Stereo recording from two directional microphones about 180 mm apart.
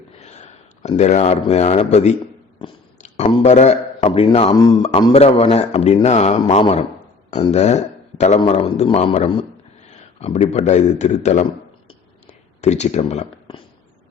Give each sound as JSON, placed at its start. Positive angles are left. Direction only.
{"t": 0.2, "sound": "a man's voice", "side_deg": 40}
{"t": 12.6, "sound": "a man's voice", "side_deg": 40}